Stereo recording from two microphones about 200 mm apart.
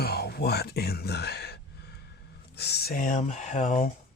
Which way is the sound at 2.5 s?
55° left (ahead or behind).